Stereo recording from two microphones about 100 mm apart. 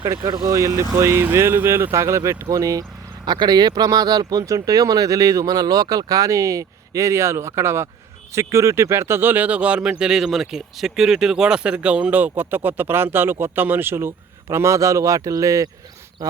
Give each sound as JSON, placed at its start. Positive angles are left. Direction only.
{"t": 0.3, "sound": "speech", "side_deg": -35}